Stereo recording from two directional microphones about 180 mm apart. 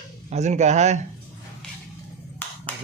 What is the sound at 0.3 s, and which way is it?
Speech, 40° right (ahead or behind).